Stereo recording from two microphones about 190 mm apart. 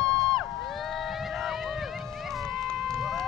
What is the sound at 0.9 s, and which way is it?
Run, centre (ahead or behind).